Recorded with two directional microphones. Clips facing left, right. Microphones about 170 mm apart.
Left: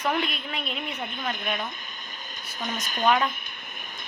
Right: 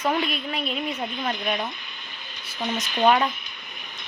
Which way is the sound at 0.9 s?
50° left (ahead or behind).